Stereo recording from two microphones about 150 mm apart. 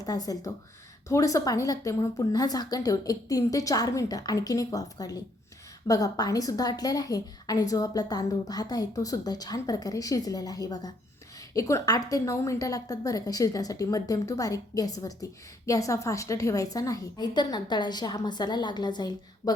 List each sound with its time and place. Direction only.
0.0 s a woman's voice: 25° left (ahead or behind)